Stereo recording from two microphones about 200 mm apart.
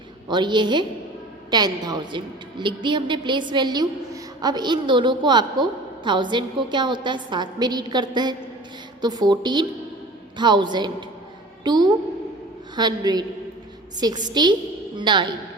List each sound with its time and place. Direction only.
0.3 s a woman's voice: 20° right (ahead or behind)
14.3 s a woman's voice: 20° right (ahead or behind)